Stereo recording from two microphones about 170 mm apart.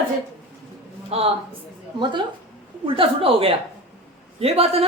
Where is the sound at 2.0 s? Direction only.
25° right (ahead or behind).